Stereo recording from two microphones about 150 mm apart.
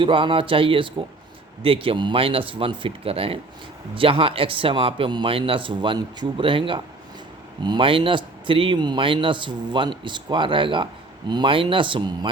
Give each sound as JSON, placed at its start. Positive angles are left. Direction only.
{"t": 0.0, "sound": "a man's voice", "side_deg": -35}